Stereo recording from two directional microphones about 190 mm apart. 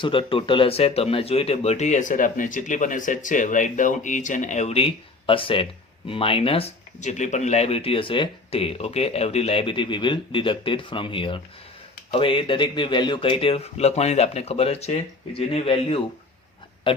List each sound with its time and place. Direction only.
0.0 s speech: 25° left (ahead or behind)